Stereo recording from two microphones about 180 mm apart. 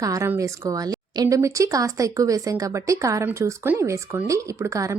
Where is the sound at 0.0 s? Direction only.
15° right (ahead or behind).